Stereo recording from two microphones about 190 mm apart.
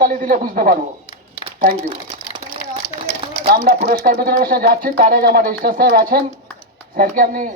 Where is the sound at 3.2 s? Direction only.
30° right (ahead or behind).